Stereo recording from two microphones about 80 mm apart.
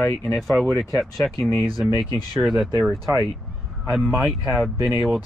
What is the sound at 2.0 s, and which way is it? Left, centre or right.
Speech, left.